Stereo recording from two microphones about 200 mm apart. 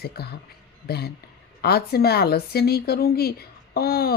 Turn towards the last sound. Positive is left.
turn(degrees=50)  # may be behind; listen again after turning